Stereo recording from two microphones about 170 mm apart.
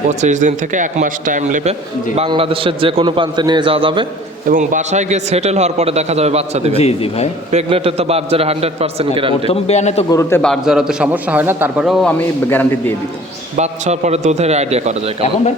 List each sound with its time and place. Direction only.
0.1 s speech: 45° right (ahead or behind)
2.1 s a man's voice: 30° right (ahead or behind)
4.4 s a man's voice: 50° right (ahead or behind)
6.7 s a man's voice: 35° left (ahead or behind)
7.5 s a man's voice: 35° right (ahead or behind)
9.5 s a man's voice: 40° left (ahead or behind)
10.1 s a man's voice: 15° left (ahead or behind)
10.4 s a man's voice: centre (ahead or behind)
12.5 s a man's voice: 10° left (ahead or behind)
13.6 s a man's voice: 40° right (ahead or behind)